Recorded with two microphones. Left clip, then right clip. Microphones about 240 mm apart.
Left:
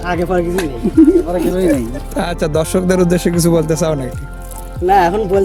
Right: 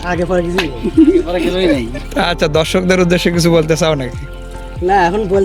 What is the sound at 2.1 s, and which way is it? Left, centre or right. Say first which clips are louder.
A man's voice: right 3 dB; centre.